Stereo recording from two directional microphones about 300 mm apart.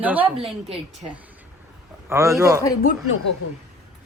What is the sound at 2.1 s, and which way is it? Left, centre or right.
Speech, centre.